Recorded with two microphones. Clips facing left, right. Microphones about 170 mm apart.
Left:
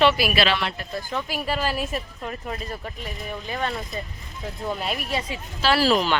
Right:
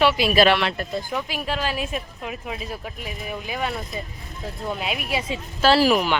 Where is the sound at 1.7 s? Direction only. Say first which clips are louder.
Even; 5° right (ahead or behind).